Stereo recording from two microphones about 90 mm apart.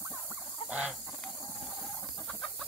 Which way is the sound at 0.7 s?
10° right (ahead or behind).